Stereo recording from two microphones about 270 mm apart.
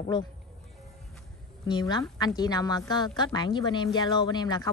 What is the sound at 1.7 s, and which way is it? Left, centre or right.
A woman's voice, centre.